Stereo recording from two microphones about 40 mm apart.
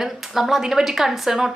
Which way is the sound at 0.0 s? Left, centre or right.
Centre.